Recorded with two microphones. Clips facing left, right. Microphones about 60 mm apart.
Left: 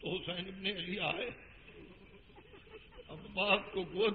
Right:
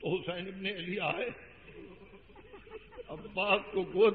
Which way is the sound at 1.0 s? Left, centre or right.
Right.